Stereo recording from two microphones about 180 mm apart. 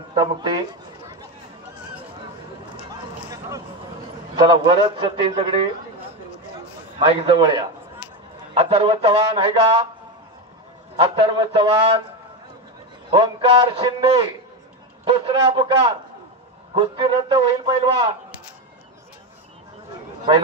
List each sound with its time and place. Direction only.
0.1 s a man's voice: 25° right (ahead or behind)
3.3 s a sound: 15° right (ahead or behind)
4.5 s a man's voice: 30° right (ahead or behind)
7.1 s a man's voice: 25° right (ahead or behind)
11.0 s a man's voice: 30° right (ahead or behind)
13.1 s a man's voice: 25° right (ahead or behind)